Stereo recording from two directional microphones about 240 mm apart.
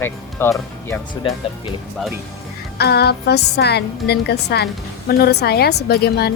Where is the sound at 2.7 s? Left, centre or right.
Left.